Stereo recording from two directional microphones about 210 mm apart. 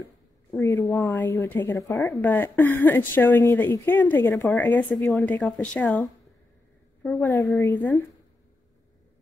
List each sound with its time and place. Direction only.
0.5 s a woman's voice: 10° left (ahead or behind)
4.5 s speech: 5° left (ahead or behind)
4.7 s speech: 20° left (ahead or behind)
5.1 s a woman's voice: 5° left (ahead or behind)
7.6 s a woman's voice: 15° left (ahead or behind)